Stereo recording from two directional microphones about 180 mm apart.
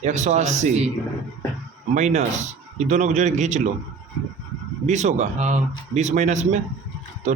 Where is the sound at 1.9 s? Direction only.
40° right (ahead or behind).